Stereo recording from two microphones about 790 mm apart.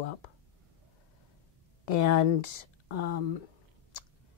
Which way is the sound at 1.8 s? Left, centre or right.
Left.